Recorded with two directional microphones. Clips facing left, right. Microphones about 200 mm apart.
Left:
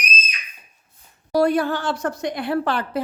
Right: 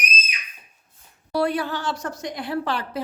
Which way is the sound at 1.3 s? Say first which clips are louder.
Left 5 dB; 45° left (ahead or behind).